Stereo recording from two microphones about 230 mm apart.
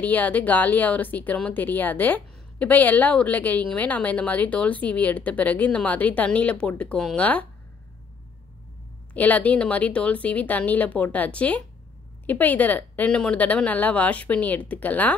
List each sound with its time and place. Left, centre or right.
0.0 s speech: centre
9.1 s speech: centre